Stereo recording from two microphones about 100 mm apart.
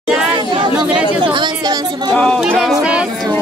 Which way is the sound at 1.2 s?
50° right (ahead or behind).